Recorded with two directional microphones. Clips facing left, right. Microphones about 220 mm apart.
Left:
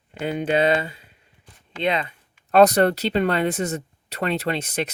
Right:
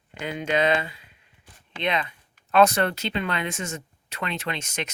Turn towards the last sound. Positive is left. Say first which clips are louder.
# left 6 dB
turn(degrees=35)  # may be behind; listen again after turning